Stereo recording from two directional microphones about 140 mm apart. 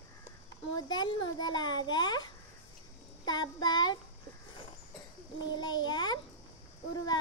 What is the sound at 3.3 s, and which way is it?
Speech, 30° left (ahead or behind).